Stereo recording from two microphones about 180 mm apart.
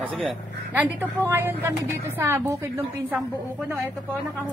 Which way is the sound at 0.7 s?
10° right (ahead or behind).